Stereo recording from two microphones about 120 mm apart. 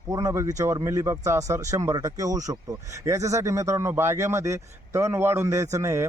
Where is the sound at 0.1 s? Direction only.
25° right (ahead or behind).